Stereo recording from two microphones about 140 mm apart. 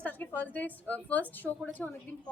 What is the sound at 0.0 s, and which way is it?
A woman's voice, 10° left (ahead or behind).